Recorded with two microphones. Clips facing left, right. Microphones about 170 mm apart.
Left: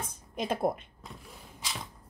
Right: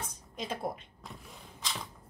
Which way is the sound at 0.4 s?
55° left (ahead or behind).